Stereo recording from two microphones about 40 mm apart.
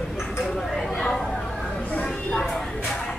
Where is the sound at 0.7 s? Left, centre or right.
Centre.